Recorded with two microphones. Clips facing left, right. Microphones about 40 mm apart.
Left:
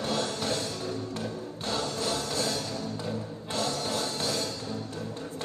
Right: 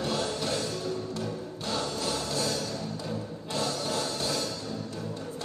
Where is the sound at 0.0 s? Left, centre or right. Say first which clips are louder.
Even; left.